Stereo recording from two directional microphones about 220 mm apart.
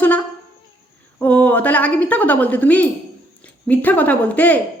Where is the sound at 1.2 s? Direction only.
5° left (ahead or behind).